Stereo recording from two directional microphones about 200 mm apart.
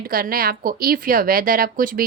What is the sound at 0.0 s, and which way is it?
A woman's voice, 45° right (ahead or behind).